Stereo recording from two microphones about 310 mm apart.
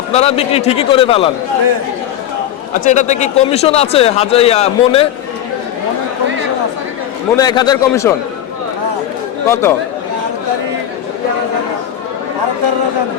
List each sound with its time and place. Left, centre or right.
0.1 s a man's voice: centre
2.8 s a man's voice: left
7.3 s a man's voice: centre
9.5 s a man's voice: centre